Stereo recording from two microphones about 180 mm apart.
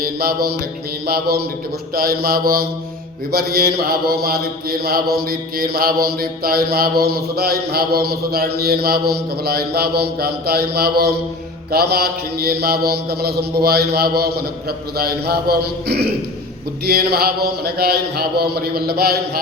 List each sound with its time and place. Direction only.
0.0 s mantra: 55° right (ahead or behind)